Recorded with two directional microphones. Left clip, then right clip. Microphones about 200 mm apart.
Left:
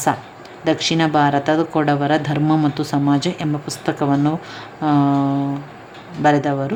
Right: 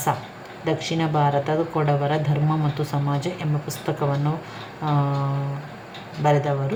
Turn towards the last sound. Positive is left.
turn(degrees=40)  # may be behind; listen again after turning